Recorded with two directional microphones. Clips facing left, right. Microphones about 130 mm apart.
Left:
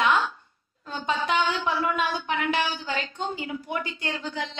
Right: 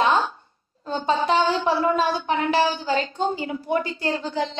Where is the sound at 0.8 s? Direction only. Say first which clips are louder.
Right 6 dB; 30° right (ahead or behind).